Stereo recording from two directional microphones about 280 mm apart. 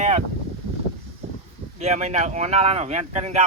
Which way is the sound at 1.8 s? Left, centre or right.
Right.